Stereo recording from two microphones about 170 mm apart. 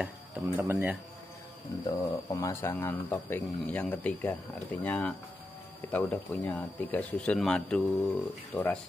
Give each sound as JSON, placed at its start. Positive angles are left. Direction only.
{"t": 0.0, "sound": "speech", "side_deg": -10}
{"t": 1.7, "sound": "speech", "side_deg": 20}